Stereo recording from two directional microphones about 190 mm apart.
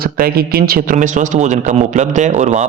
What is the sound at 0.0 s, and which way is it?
Speech, 55° right (ahead or behind).